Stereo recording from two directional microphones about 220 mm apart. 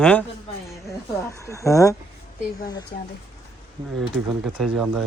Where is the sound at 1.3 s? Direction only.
15° left (ahead or behind).